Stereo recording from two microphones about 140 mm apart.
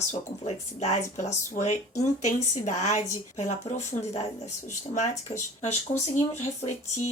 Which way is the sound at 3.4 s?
55° left (ahead or behind).